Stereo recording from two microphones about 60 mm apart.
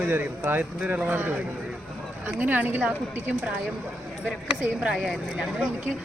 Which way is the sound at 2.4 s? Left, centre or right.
Right.